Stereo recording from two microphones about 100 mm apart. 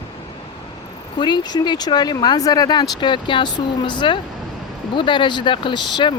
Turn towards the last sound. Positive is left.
turn(degrees=55)  # may be behind; listen again after turning